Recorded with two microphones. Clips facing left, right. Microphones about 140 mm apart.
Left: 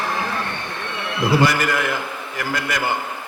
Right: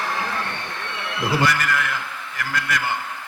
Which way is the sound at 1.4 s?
10° left (ahead or behind).